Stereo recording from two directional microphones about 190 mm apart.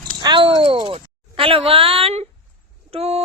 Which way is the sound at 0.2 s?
25° right (ahead or behind).